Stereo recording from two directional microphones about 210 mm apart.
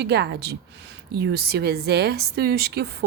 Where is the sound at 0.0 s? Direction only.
50° right (ahead or behind).